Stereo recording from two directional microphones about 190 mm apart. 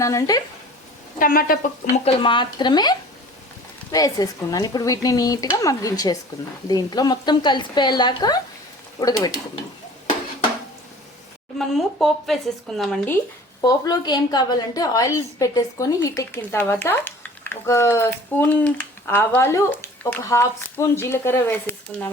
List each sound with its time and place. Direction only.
0.0 s a woman's voice: 15° left (ahead or behind)
1.2 s speech: 50° left (ahead or behind)
2.0 s speech: 25° left (ahead or behind)
11.5 s speech: centre (ahead or behind)
13.6 s a woman's voice: 20° left (ahead or behind)